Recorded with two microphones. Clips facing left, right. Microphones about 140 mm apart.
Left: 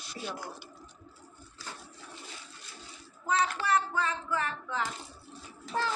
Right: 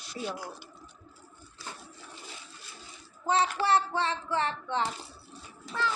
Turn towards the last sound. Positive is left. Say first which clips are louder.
# even
turn(degrees=35)  # may be behind; listen again after turning